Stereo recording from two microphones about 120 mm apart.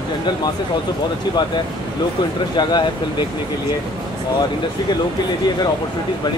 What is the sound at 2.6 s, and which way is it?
Speech, 40° left (ahead or behind).